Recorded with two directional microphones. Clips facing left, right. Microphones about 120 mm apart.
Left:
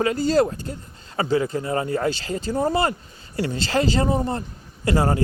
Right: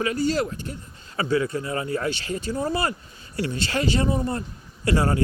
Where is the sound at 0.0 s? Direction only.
35° left (ahead or behind).